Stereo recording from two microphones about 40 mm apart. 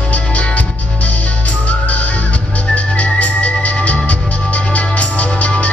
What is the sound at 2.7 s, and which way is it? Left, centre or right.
Organ, left.